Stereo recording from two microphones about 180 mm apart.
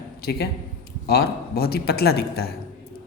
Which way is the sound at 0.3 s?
65° left (ahead or behind).